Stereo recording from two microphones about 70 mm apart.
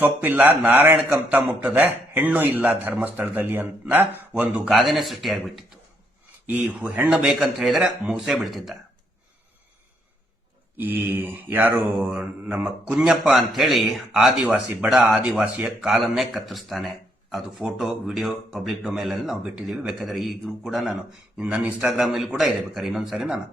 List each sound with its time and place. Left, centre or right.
0.0 s a man's voice: right
4.6 s speech: centre
6.5 s a man's voice: right
7.1 s a man's voice: centre
8.2 s speech: centre
10.8 s a man's voice: right
12.8 s a man's voice: centre
16.0 s speech: centre
19.4 s a man's voice: centre
21.3 s a man's voice: centre